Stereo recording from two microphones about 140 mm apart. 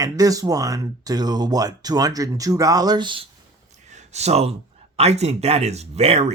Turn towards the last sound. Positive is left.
turn(degrees=-50)  # may be behind; listen again after turning